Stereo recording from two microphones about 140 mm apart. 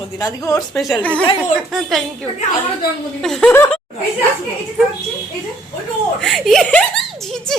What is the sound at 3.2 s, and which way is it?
Speech, 5° left (ahead or behind).